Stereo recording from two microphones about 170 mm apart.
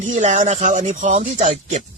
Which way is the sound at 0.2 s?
45° right (ahead or behind).